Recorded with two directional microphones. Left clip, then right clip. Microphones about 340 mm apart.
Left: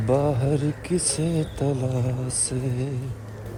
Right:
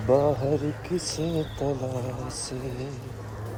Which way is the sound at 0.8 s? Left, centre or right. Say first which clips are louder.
Left 4 dB; left.